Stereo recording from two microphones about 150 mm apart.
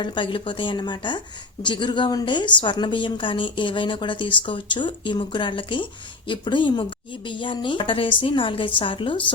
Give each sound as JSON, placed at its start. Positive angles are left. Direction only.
{"t": 0.0, "sound": "a woman's voice", "side_deg": 35}